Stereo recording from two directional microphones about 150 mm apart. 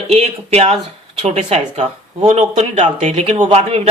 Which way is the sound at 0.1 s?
45° right (ahead or behind).